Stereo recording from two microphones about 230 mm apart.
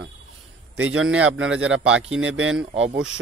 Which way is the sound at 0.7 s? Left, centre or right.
Right.